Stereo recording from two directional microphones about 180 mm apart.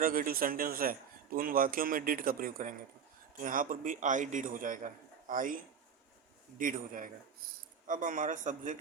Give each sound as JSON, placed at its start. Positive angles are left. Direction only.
{"t": 0.0, "sound": "a man's voice", "side_deg": -50}
{"t": 6.6, "sound": "a man's voice", "side_deg": -50}